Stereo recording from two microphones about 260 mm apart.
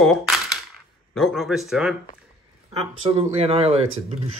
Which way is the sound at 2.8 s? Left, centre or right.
Right.